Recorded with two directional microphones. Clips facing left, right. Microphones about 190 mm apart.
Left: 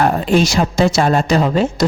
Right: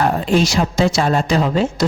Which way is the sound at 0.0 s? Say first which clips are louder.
Left 2 dB; 55° left (ahead or behind).